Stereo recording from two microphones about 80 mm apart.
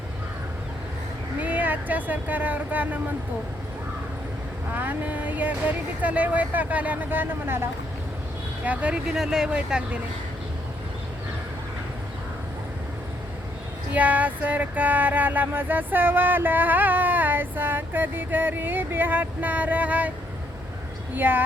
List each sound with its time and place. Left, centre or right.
1.4 s speech: centre
4.7 s speech: right
8.6 s speech: centre
13.9 s speech: centre
21.2 s speech: right